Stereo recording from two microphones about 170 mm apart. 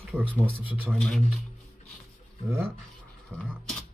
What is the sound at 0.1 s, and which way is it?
Speech, 10° left (ahead or behind).